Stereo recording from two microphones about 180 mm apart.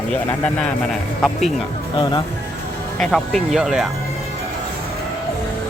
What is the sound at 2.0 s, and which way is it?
Speech, 25° left (ahead or behind).